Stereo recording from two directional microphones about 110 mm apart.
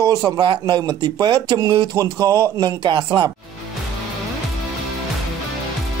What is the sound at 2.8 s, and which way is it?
Speech, 45° right (ahead or behind).